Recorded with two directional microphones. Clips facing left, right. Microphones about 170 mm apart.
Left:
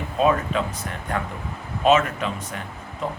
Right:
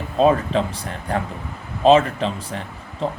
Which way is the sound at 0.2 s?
30° right (ahead or behind).